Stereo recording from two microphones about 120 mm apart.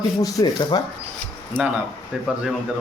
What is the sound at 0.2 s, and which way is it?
Speech, 30° left (ahead or behind).